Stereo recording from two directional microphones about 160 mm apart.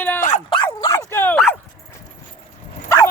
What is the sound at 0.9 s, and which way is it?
Dog, 15° left (ahead or behind).